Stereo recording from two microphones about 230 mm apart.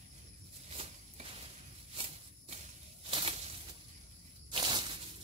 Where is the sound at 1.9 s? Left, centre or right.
Right.